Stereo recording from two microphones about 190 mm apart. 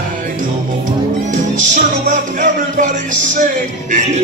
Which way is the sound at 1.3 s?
40° right (ahead or behind).